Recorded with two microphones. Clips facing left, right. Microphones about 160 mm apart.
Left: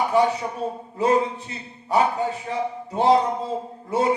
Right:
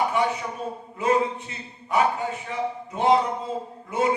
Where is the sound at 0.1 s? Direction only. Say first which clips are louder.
Left 5 dB; 35° left (ahead or behind).